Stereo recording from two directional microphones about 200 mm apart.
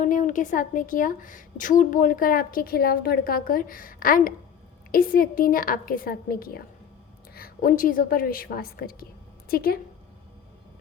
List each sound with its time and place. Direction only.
0.0 s speech: 40° left (ahead or behind)